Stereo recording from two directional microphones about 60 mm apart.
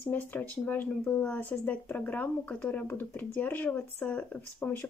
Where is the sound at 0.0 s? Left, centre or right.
Left.